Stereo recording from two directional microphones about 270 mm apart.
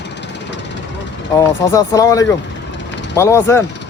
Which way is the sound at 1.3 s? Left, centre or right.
Centre.